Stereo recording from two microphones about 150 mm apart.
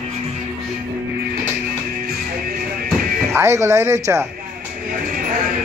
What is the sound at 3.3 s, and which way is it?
Speech, 20° right (ahead or behind).